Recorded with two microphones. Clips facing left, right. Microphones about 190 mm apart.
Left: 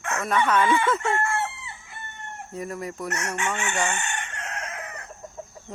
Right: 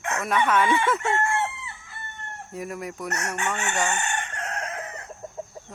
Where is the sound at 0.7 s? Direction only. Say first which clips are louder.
Left 1 dB; 20° right (ahead or behind).